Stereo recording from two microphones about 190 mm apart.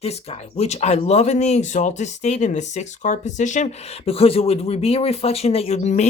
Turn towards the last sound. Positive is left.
turn(degrees=40)  # may be behind; listen again after turning